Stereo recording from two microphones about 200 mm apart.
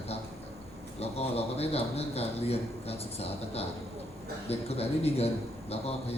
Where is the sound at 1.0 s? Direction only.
30° left (ahead or behind).